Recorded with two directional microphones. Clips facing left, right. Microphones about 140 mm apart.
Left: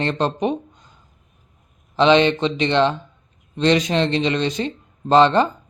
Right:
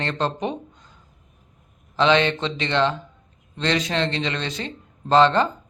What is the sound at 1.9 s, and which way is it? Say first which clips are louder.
Speech: left 4 dB; 20° left (ahead or behind).